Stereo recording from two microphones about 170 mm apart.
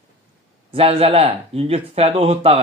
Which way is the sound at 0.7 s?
35° right (ahead or behind).